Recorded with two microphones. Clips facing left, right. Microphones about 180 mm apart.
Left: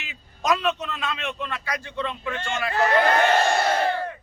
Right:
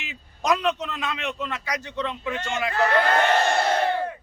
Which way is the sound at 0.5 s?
15° right (ahead or behind).